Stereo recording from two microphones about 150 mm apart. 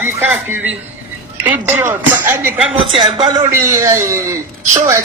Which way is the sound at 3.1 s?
30° right (ahead or behind).